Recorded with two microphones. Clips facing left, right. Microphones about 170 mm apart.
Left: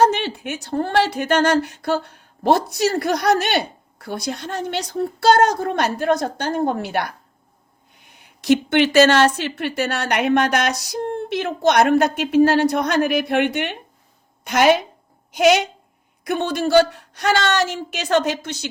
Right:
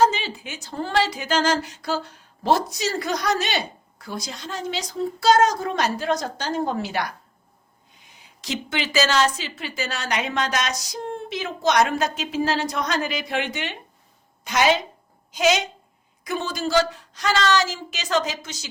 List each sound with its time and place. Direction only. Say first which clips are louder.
0.0 s speech: left 3 dB; 65° left (ahead or behind)